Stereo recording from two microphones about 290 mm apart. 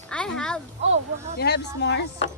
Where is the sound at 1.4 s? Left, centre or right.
Left.